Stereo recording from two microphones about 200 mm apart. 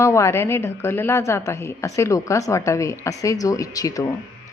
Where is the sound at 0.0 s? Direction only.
15° left (ahead or behind).